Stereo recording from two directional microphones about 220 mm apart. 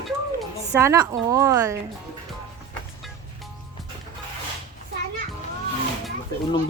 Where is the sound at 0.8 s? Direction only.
15° right (ahead or behind).